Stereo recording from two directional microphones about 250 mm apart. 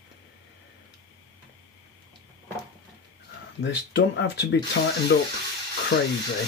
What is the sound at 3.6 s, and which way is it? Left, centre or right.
Speech, left.